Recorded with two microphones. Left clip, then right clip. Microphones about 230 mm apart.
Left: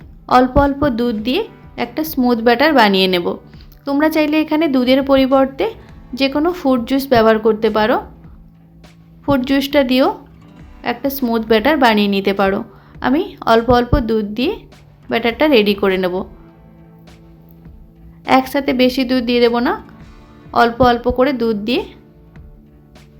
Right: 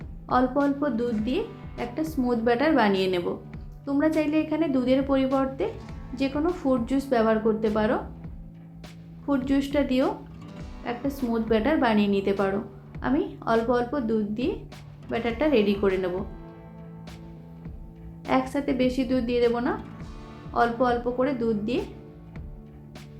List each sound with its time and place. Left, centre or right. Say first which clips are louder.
0.3 s a woman's voice: left 11 dB; left
9.2 s a woman's voice: left 10 dB; left
18.3 s a woman's voice: left 11 dB; left